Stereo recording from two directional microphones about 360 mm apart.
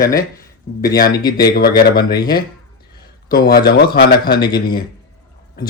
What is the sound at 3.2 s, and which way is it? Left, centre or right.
Speech, left.